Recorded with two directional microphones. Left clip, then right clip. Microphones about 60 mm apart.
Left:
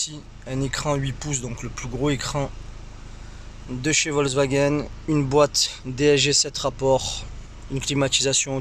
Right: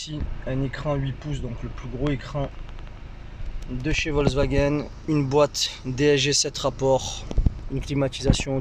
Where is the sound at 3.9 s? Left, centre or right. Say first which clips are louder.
Left 2 dB; left; by 7.3 s centre.